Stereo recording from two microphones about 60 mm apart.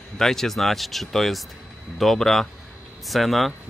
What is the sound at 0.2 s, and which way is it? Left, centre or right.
Speech, centre.